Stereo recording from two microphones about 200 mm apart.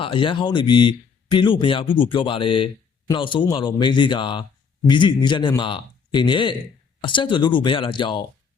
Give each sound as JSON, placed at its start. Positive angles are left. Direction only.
{"t": 0.0, "sound": "speech", "side_deg": 25}